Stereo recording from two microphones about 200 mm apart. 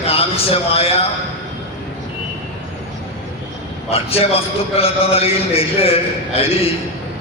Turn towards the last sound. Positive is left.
turn(degrees=30)  # may be behind; listen again after turning